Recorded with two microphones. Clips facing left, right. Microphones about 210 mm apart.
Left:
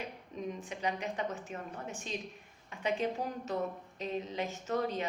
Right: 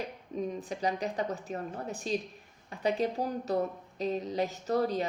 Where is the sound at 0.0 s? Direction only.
35° right (ahead or behind).